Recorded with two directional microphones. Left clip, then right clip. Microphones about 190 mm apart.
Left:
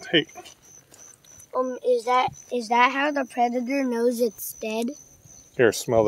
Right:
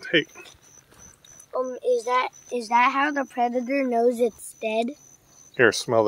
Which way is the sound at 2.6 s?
70° left (ahead or behind).